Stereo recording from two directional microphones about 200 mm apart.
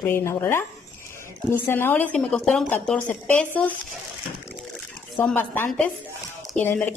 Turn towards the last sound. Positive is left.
turn(degrees=10)  # may be behind; listen again after turning